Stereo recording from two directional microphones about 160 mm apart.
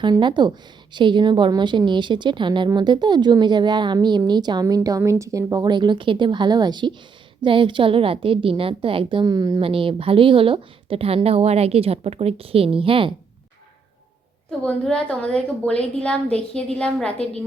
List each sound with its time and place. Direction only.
0.0 s a woman's voice: 30° right (ahead or behind)
9.6 s a woman's voice: 35° right (ahead or behind)
14.6 s a woman's voice: 5° left (ahead or behind)